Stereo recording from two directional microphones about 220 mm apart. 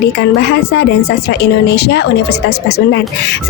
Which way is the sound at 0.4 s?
50° left (ahead or behind).